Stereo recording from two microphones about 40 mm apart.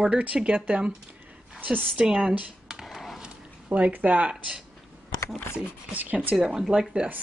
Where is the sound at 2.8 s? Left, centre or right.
Centre.